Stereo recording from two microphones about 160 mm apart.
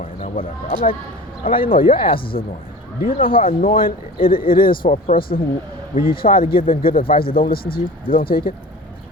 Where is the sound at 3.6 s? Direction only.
65° left (ahead or behind).